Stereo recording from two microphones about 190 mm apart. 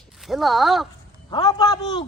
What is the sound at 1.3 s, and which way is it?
Speech, 20° left (ahead or behind).